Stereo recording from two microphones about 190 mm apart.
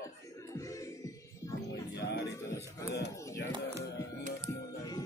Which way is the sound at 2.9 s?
65° left (ahead or behind).